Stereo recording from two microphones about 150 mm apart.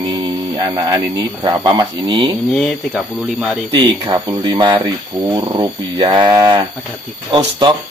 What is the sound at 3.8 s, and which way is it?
Speech, 25° right (ahead or behind).